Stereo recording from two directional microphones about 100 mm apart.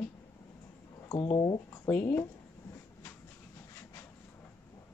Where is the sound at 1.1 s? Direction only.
50° left (ahead or behind).